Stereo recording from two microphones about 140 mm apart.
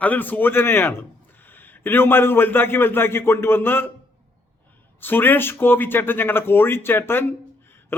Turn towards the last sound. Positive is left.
turn(degrees=15)  # may be behind; listen again after turning